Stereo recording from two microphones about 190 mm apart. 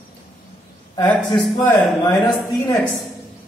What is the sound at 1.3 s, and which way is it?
Speech, 20° left (ahead or behind).